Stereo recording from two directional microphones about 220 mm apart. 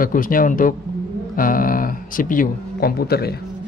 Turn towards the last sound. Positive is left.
turn(degrees=45)  # may be behind; listen again after turning